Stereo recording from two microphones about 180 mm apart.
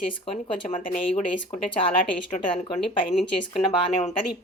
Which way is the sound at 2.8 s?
Centre (ahead or behind).